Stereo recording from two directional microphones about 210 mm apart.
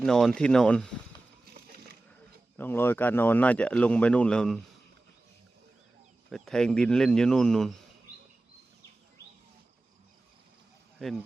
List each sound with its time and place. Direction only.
0.0 s speech: centre (ahead or behind)
1.5 s a sound: 45° right (ahead or behind)
2.6 s speech: 10° left (ahead or behind)
6.3 s speech: centre (ahead or behind)
11.0 s speech: 5° left (ahead or behind)